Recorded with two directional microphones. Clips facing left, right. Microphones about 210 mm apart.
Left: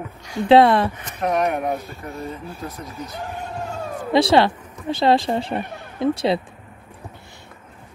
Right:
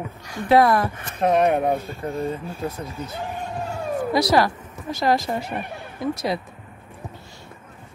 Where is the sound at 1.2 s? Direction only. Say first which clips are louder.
Right 3 dB; 25° right (ahead or behind).